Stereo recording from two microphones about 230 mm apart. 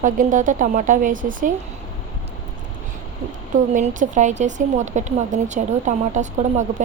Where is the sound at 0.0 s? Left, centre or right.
Right.